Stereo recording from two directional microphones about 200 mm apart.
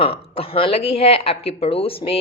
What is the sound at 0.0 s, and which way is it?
Speech, 30° left (ahead or behind).